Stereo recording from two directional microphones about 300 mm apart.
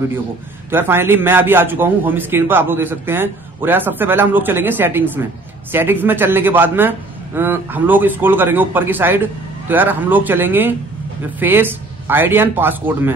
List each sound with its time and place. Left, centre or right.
0.7 s a man's voice: centre